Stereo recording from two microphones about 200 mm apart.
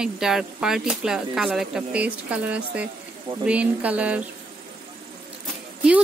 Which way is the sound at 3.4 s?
5° right (ahead or behind).